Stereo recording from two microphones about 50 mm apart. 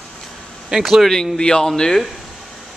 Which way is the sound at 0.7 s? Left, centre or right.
Centre.